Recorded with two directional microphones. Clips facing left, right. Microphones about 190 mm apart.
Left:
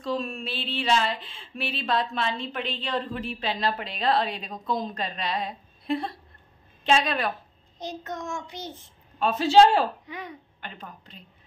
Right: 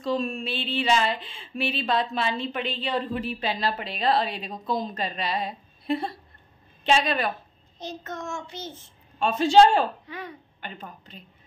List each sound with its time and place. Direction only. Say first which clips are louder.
0.0 s a woman's voice: right 3 dB; centre (ahead or behind)
7.8 s child singing: left 1 dB; 15° left (ahead or behind)
9.2 s speech: right 1 dB; 5° left (ahead or behind)
10.0 s speech: right 1 dB; 15° left (ahead or behind)
10.6 s speech: right 4 dB; centre (ahead or behind)